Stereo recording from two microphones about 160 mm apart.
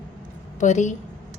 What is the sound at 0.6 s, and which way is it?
Speech, 50° left (ahead or behind).